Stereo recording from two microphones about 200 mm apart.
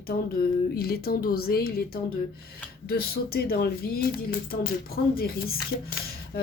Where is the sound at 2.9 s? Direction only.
50° left (ahead or behind).